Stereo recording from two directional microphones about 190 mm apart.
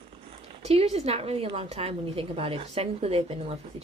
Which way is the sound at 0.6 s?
35° right (ahead or behind).